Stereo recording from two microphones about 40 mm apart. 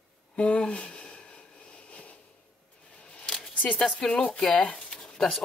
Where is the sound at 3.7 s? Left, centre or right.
Centre.